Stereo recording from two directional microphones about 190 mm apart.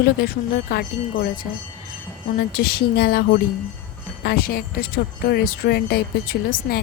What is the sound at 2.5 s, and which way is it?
Speech, 50° left (ahead or behind).